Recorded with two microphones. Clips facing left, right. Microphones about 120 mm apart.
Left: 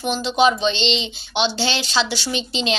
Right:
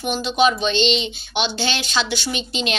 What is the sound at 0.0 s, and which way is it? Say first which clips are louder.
Speech: left 1 dB; 30° left (ahead or behind).